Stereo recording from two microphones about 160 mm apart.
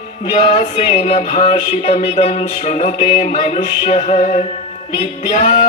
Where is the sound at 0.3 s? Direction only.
40° left (ahead or behind).